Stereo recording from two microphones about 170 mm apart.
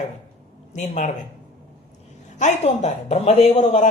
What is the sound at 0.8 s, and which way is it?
Speech, 45° left (ahead or behind).